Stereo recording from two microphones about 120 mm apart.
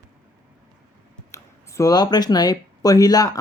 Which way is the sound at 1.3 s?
25° left (ahead or behind).